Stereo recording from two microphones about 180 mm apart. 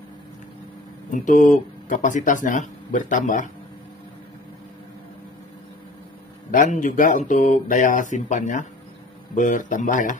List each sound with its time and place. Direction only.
1.1 s speech: 45° left (ahead or behind)
6.5 s speech: 45° left (ahead or behind)